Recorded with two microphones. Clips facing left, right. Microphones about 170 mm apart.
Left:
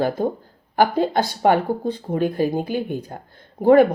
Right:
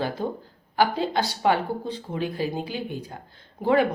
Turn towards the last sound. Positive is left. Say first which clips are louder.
# left 8 dB
turn(degrees=50)  # may be behind; listen again after turning